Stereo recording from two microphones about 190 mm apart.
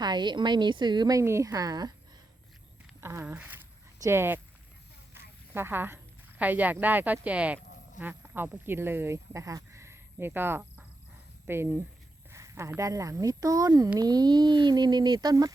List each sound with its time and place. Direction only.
0.0 s a woman's voice: 25° right (ahead or behind)
3.0 s speech: 15° right (ahead or behind)
5.1 s a sound: 10° right (ahead or behind)
6.4 s a woman's voice: 10° right (ahead or behind)